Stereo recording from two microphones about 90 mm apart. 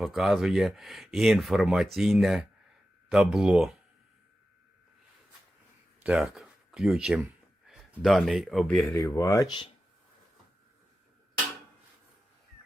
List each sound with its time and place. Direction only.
0.0 s speech: centre (ahead or behind)
6.1 s speech: 5° right (ahead or behind)
8.9 s speech: 35° left (ahead or behind)
9.5 s speech: 60° left (ahead or behind)